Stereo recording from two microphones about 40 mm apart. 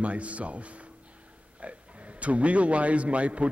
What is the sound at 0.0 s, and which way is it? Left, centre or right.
A man's voice, right.